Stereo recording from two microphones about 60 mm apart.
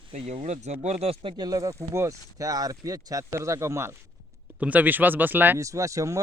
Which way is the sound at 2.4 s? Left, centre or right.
Right.